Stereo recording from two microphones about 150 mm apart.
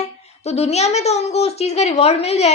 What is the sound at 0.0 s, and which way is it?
A woman's voice, 45° left (ahead or behind).